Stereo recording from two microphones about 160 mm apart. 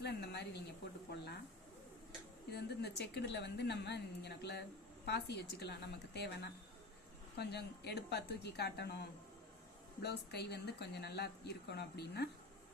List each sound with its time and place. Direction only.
0.0 s speech: 90° left
2.5 s speech: 90° left
10.0 s speech: 90° left